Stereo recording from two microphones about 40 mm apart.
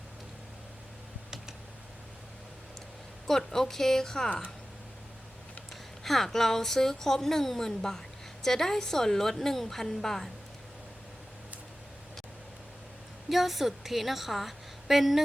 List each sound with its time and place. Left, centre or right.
3.2 s speech: centre
6.0 s speech: centre
13.3 s a woman's voice: centre